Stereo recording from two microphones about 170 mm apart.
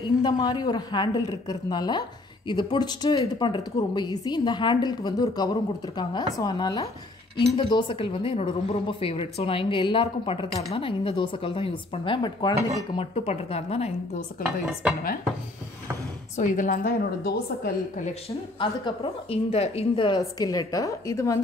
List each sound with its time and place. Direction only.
0.2 s a woman's voice: 25° left (ahead or behind)
16.3 s a woman's voice: 50° left (ahead or behind); by 18.0 s 65° left (ahead or behind)
18.6 s a woman's voice: 30° left (ahead or behind)